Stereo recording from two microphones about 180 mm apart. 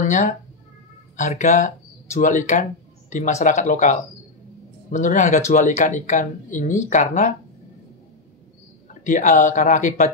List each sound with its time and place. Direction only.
0.0 s speech: 45° left (ahead or behind)
9.0 s speech: 45° left (ahead or behind)